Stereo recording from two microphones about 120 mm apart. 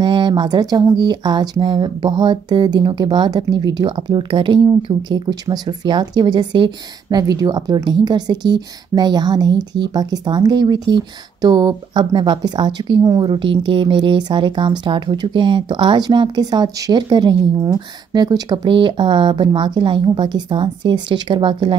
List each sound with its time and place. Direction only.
0.0 s speech: 40° right (ahead or behind)